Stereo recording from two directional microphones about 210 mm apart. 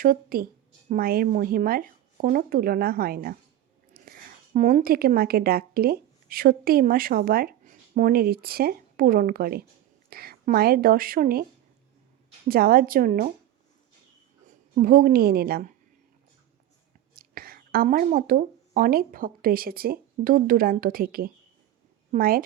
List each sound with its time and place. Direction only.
0.0 s speech: 45° right (ahead or behind)
4.0 s a sound: 45° right (ahead or behind)
4.5 s speech: 40° right (ahead or behind)
12.5 s speech: 45° right (ahead or behind)
14.4 s speech: 40° right (ahead or behind)
17.2 s a woman's voice: 45° right (ahead or behind)